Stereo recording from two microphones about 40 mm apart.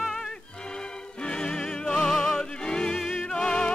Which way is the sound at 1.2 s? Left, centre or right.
Left.